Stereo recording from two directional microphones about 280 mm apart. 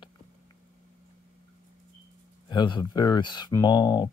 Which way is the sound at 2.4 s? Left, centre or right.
Centre.